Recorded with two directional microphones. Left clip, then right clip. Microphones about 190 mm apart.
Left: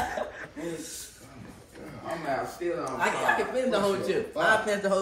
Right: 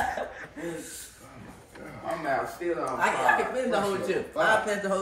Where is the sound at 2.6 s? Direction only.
45° right (ahead or behind).